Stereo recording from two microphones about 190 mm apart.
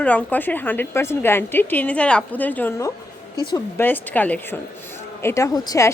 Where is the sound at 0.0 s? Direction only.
5° left (ahead or behind).